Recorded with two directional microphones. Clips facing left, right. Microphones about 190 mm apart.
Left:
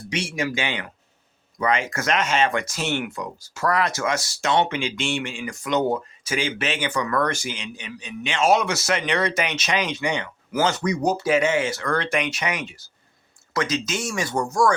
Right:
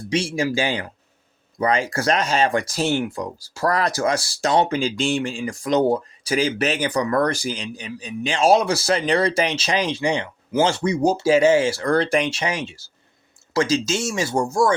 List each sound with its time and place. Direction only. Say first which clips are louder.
0.1 s speech: right 5 dB; 30° right (ahead or behind)